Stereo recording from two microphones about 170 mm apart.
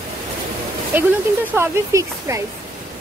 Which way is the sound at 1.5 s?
15° right (ahead or behind).